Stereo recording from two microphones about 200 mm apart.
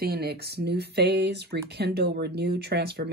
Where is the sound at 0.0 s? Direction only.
50° right (ahead or behind).